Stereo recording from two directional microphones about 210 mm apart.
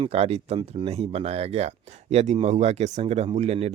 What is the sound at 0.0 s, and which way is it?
Speech, 30° right (ahead or behind).